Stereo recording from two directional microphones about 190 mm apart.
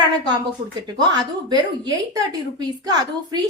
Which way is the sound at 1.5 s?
20° right (ahead or behind).